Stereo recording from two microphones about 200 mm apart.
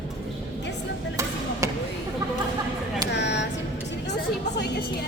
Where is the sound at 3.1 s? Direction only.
60° left (ahead or behind).